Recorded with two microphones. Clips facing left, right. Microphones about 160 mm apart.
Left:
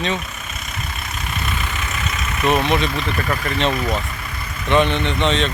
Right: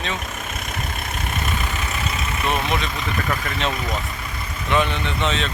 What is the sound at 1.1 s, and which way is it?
Vehicle, 50° right (ahead or behind).